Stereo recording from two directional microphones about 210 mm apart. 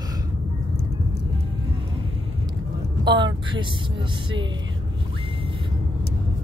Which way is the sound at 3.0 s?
20° right (ahead or behind).